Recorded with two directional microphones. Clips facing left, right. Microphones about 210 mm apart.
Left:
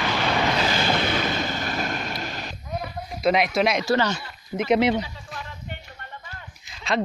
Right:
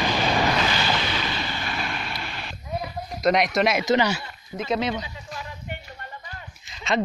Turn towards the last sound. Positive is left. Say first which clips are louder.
# right 1 dB
turn(degrees=0)  # may be behind; listen again after turning